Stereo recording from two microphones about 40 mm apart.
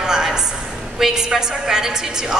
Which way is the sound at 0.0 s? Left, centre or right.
Centre.